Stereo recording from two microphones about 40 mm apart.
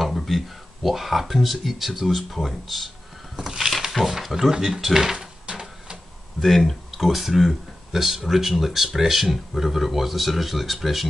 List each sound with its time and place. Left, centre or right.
0.0 s a sound: centre
0.8 s speech: centre
3.3 s speech: centre
5.5 s printer: right
6.4 s speech: centre